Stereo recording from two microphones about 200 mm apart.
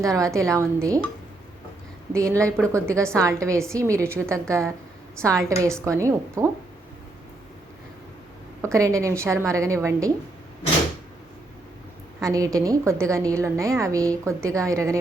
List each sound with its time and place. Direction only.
0.0 s a woman's voice: 15° right (ahead or behind)
2.1 s a woman's voice: 15° right (ahead or behind)
8.6 s a woman's voice: 15° right (ahead or behind)
12.2 s a woman's voice: 15° right (ahead or behind)